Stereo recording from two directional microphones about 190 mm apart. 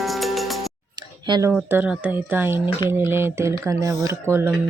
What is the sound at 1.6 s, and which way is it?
Speech, 10° right (ahead or behind).